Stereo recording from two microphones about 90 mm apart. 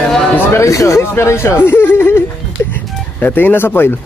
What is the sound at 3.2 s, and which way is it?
Speech, 20° left (ahead or behind).